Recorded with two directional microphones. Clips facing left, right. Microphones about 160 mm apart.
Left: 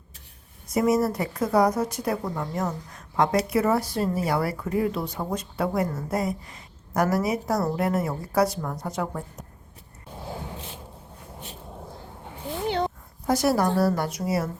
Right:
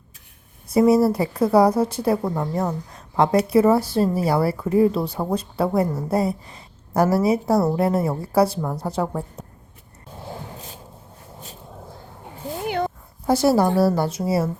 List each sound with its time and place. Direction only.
0.7 s a woman's voice: 30° right (ahead or behind)
13.2 s a woman's voice: 30° right (ahead or behind)